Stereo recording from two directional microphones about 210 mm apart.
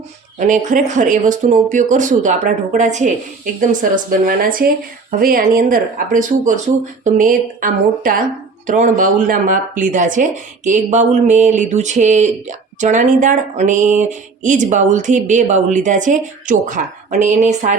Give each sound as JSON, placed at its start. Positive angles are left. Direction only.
{"t": 0.3, "sound": "speech", "side_deg": -35}